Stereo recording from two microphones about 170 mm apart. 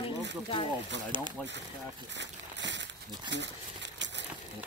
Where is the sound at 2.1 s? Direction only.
90° right.